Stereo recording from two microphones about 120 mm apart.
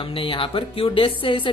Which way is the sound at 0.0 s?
45° left (ahead or behind).